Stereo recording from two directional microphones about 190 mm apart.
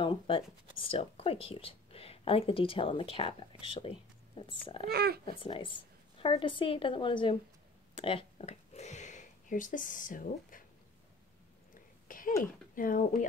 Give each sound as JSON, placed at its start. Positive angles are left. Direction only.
{"t": 0.0, "sound": "speech", "side_deg": 30}
{"t": 4.9, "sound": "speech", "side_deg": -55}
{"t": 5.2, "sound": "speech", "side_deg": 25}
{"t": 11.7, "sound": "a sound", "side_deg": 45}
{"t": 12.7, "sound": "speech", "side_deg": 45}